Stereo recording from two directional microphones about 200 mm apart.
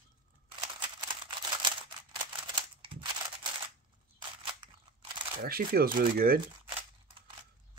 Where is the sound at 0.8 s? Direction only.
20° right (ahead or behind).